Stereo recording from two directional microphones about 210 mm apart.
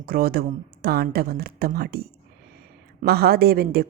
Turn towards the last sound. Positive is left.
turn(degrees=-45)  # may be behind; listen again after turning